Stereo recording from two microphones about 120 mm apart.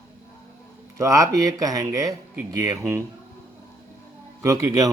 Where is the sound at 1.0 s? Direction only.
25° right (ahead or behind).